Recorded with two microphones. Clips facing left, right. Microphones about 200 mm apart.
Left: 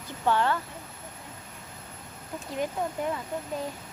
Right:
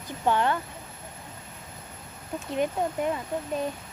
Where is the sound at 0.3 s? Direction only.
20° right (ahead or behind).